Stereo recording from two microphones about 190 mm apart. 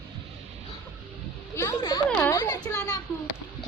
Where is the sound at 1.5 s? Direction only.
15° left (ahead or behind).